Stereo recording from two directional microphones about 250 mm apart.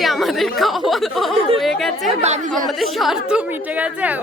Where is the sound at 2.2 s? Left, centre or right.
Right.